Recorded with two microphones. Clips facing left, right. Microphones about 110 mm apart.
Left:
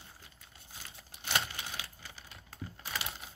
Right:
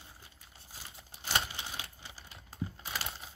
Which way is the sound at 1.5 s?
25° right (ahead or behind).